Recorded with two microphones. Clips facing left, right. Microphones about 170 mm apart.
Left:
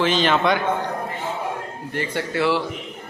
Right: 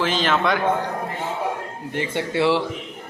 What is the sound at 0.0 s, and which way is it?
Speech, centre (ahead or behind).